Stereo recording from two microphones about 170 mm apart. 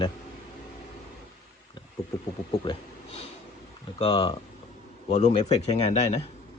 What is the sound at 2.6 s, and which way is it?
Speech, 35° left (ahead or behind).